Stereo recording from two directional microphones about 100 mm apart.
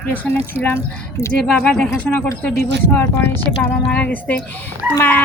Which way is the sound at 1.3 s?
10° left (ahead or behind).